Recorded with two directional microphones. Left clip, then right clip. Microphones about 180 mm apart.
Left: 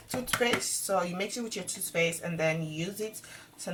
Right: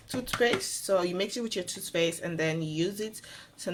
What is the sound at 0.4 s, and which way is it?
Speech, 55° right (ahead or behind).